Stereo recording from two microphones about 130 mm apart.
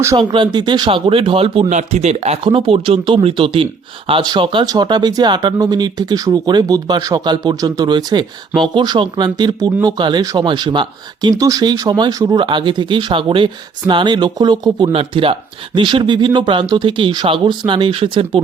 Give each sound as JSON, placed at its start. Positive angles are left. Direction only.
{"t": 0.3, "sound": "speech", "side_deg": -35}
{"t": 1.7, "sound": "speech", "side_deg": -60}
{"t": 2.4, "sound": "speech", "side_deg": -40}